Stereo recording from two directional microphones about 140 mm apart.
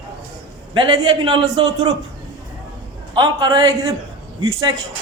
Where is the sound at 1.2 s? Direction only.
40° right (ahead or behind).